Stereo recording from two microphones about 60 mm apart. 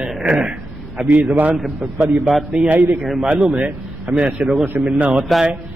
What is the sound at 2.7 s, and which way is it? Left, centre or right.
Speech, right.